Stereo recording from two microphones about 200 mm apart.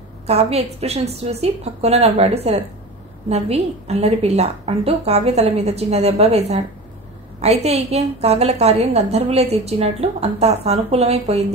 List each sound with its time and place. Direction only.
0.3 s a woman's voice: 30° right (ahead or behind)